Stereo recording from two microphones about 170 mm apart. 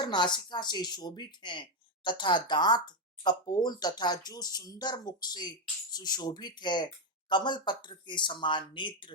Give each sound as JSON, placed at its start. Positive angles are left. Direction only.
{"t": 0.0, "sound": "speech", "side_deg": 25}